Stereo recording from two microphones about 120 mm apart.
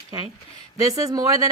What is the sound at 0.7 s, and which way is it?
Speech, 30° right (ahead or behind).